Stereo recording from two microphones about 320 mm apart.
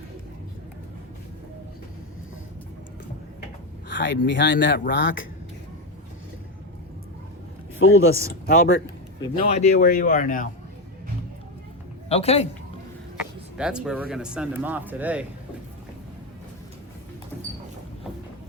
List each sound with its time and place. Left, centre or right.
3.8 s speech: left
7.8 s a man's voice: left
12.0 s a man's voice: centre
13.6 s speech: centre